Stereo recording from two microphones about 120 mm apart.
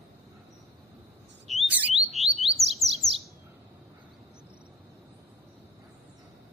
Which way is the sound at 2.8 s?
25° left (ahead or behind).